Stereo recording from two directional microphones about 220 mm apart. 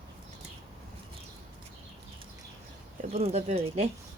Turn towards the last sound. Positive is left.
turn(degrees=-30)  # may be behind; listen again after turning